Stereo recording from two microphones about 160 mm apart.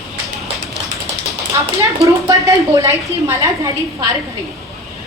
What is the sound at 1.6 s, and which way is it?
A woman's voice, 20° right (ahead or behind).